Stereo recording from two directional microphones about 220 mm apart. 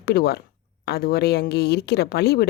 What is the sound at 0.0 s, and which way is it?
Speech, 45° left (ahead or behind).